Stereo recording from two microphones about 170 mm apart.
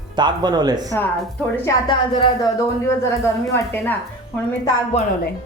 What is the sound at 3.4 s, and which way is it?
Speech, 15° left (ahead or behind).